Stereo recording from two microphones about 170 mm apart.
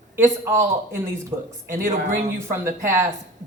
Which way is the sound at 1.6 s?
55° right (ahead or behind).